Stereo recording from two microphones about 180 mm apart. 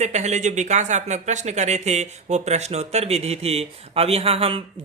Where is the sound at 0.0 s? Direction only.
40° right (ahead or behind).